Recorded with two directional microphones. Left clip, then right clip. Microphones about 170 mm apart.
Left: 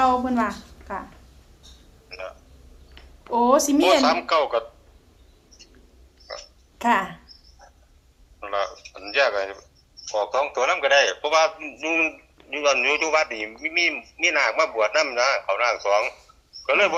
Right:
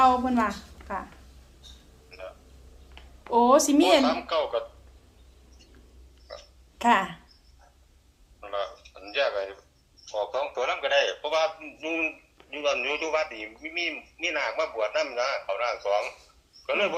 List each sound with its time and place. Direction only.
0.0 s speech: centre (ahead or behind)
2.0 s a sound: 65° left (ahead or behind)
3.2 s a woman's voice: centre (ahead or behind)
4.0 s a woman's voice: 65° left (ahead or behind)
6.3 s hiccup: 65° left (ahead or behind)
6.7 s speech: centre (ahead or behind)
8.4 s a man's voice: 65° left (ahead or behind)